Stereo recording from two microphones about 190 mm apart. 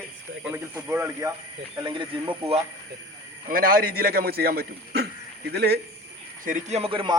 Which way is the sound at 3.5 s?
50° right (ahead or behind).